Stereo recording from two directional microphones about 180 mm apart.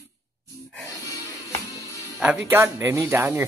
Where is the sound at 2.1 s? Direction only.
10° right (ahead or behind).